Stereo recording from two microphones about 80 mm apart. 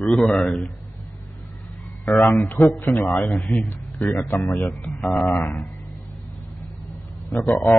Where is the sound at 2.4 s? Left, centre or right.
Left.